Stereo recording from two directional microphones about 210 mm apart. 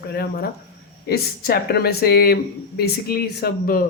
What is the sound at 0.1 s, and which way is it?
Speech, 50° left (ahead or behind).